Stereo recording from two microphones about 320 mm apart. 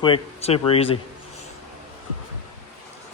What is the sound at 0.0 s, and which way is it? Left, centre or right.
Speech, centre.